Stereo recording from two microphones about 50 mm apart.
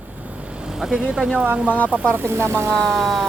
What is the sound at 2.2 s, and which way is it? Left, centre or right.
Speech, right.